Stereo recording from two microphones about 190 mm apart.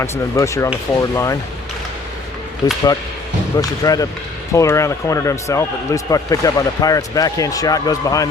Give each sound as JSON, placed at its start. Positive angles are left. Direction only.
{"t": 0.0, "sound": "a man's voice", "side_deg": 15}
{"t": 2.6, "sound": "a man's voice", "side_deg": 20}